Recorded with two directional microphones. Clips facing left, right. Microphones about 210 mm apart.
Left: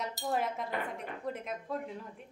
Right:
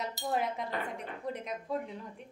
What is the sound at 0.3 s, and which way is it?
A woman's voice, centre (ahead or behind).